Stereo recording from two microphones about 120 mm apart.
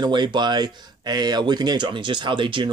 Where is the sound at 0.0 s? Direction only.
40° right (ahead or behind).